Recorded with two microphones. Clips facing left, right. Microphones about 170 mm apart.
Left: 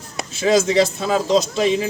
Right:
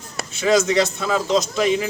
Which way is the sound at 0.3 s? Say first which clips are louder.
Left 2 dB; 30° left (ahead or behind).